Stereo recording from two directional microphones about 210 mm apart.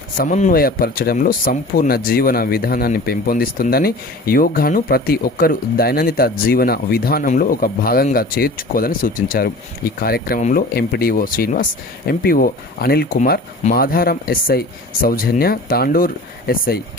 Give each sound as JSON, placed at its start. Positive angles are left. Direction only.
{"t": 0.2, "sound": "speech", "side_deg": 35}